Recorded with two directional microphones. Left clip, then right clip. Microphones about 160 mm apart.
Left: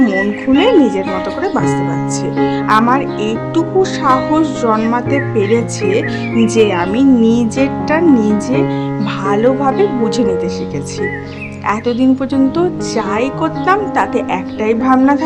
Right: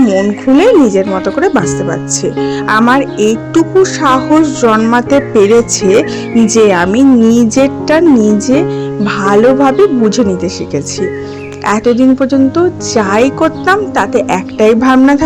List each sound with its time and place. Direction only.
0.0 s speech: 20° right (ahead or behind)
5.0 s speech: 40° right (ahead or behind)
11.6 s speech: 30° right (ahead or behind)